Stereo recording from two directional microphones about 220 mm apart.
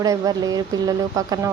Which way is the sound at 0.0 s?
15° right (ahead or behind).